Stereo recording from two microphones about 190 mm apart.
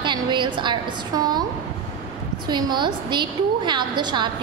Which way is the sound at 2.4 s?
20° right (ahead or behind).